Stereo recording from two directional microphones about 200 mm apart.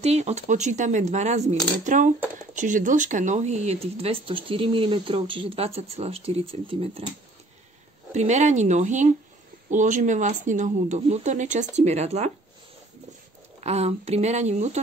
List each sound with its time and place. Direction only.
0.0 s speech: 35° right (ahead or behind)
8.1 s speech: 35° right (ahead or behind)
13.6 s speech: 30° right (ahead or behind)